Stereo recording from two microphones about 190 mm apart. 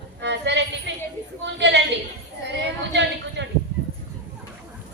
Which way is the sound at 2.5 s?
65° right (ahead or behind).